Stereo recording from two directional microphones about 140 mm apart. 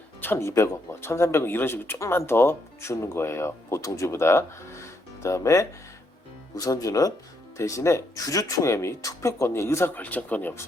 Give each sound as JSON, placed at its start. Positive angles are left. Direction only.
{"t": 0.2, "sound": "speech", "side_deg": 15}